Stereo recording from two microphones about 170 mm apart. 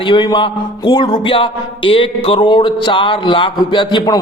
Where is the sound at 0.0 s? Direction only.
25° left (ahead or behind).